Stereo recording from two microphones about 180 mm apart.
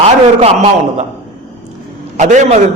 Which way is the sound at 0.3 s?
35° right (ahead or behind).